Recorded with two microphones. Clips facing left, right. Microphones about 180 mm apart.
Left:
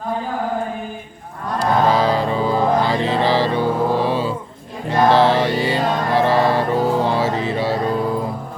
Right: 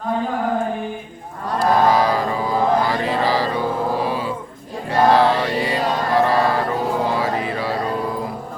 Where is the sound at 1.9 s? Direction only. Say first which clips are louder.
Left 1 dB; 25° left (ahead or behind).